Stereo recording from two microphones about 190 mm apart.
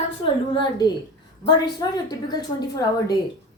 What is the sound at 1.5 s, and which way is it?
A woman's voice, 20° left (ahead or behind).